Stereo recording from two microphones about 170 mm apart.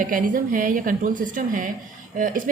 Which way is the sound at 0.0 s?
55° right (ahead or behind).